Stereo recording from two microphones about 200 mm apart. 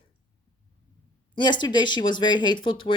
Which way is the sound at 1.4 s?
20° left (ahead or behind).